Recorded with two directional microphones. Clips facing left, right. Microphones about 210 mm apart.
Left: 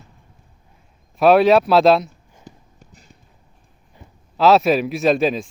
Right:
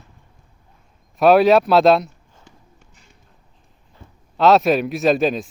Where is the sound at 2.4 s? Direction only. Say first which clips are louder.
Left 7 dB; 35° left (ahead or behind).